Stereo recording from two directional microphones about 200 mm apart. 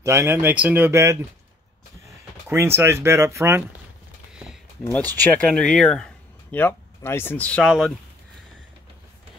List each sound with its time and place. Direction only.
0.0 s speech: 15° right (ahead or behind)
2.4 s speech: 10° right (ahead or behind)
5.2 s speech: 5° left (ahead or behind)